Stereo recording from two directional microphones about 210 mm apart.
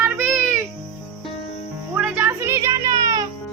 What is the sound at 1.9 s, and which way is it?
Music, 5° right (ahead or behind).